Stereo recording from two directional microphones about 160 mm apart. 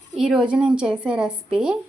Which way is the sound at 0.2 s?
5° right (ahead or behind).